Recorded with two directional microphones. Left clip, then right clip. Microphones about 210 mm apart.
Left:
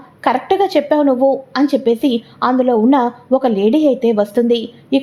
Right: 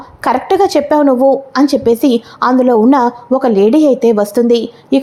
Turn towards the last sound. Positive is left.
turn(degrees=-15)  # may be behind; listen again after turning